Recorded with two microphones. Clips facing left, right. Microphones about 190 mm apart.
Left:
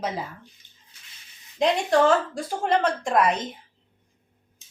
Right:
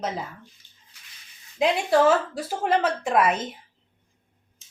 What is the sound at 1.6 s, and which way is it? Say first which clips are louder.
A woman's voice: even; 5° right (ahead or behind).